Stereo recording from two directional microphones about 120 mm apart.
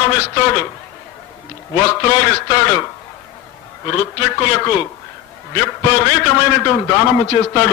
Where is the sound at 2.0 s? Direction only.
35° left (ahead or behind).